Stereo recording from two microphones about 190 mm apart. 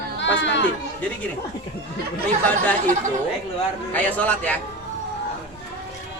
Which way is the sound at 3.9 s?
10° left (ahead or behind).